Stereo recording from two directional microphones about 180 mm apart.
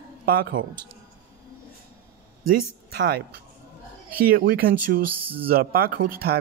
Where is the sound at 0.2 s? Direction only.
55° right (ahead or behind).